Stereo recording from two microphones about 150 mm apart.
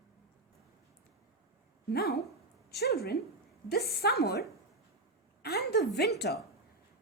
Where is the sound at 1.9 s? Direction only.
90° left.